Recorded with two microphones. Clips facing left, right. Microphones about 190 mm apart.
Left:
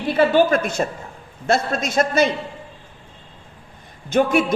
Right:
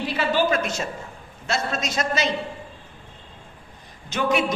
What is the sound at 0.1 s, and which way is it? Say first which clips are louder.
Speech: left 8 dB; 55° left (ahead or behind).